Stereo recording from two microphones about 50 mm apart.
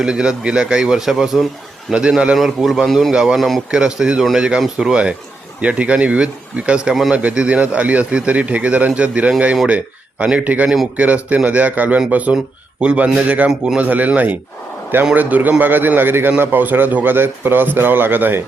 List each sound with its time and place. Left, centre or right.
0.0 s a man's voice: centre
1.9 s a man's voice: centre
2.3 s a man's voice: centre
3.1 s a man's voice: centre
3.3 s a man's voice: centre
3.7 s a man's voice: centre
5.6 s a man's voice: right